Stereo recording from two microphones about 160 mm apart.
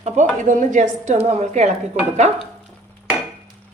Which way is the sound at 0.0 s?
50° right (ahead or behind).